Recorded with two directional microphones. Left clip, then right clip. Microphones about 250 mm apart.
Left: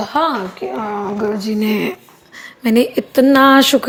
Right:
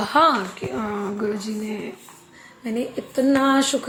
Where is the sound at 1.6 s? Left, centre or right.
Left.